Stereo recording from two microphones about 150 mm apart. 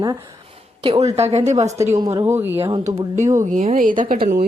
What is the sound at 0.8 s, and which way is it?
Speech, 45° right (ahead or behind).